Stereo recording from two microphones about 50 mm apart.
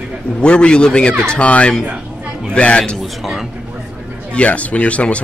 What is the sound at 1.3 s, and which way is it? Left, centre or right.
Speech, left.